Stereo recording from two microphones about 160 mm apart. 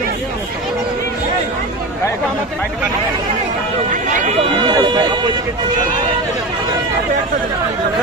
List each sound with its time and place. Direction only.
4.1 s speech: 40° right (ahead or behind)